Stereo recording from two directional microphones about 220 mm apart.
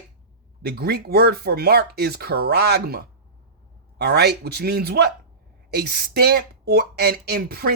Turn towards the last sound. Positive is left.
turn(degrees=-45)  # may be behind; listen again after turning